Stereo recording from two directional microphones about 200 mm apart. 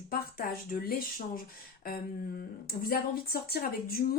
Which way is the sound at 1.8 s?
50° left (ahead or behind).